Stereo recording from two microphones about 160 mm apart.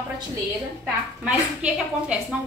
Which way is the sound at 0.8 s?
5° right (ahead or behind).